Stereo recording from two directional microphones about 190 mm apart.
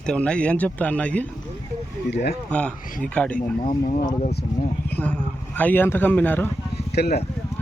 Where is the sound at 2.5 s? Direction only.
5° left (ahead or behind).